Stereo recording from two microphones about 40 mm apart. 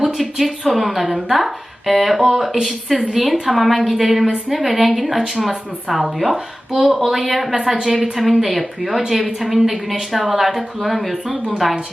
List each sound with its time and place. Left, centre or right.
0.0 s a woman's voice: centre